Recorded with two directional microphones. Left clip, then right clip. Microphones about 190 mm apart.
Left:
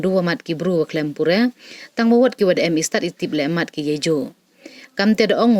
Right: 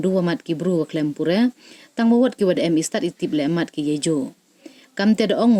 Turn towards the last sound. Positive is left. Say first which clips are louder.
# left 2 dB
turn(degrees=15)  # may be behind; listen again after turning